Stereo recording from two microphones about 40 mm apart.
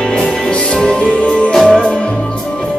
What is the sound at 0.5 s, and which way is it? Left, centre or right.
Music, centre.